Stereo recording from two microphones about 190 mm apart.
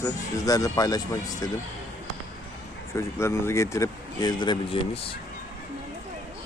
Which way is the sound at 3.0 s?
15° left (ahead or behind).